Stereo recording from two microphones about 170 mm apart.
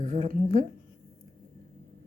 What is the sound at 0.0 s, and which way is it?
Speech, 45° right (ahead or behind).